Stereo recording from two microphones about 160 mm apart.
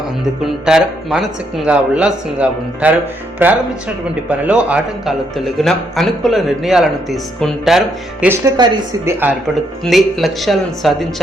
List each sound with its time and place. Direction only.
0.4 s speech: centre (ahead or behind)
8.5 s a woman's voice: 25° right (ahead or behind)
9.8 s speech: centre (ahead or behind)